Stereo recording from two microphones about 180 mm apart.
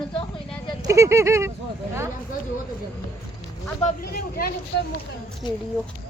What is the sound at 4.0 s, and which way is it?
Speech, 55° left (ahead or behind).